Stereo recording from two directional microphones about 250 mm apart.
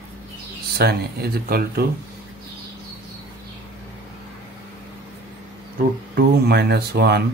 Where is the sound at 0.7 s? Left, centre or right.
Right.